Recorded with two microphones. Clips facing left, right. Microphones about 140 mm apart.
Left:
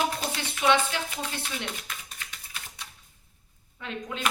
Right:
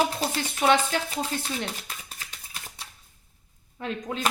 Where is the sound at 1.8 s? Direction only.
35° right (ahead or behind).